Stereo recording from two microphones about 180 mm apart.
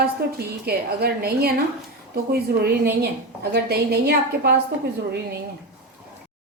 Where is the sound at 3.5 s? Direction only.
60° right (ahead or behind).